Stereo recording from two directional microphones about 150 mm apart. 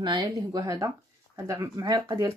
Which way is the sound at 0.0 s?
30° right (ahead or behind).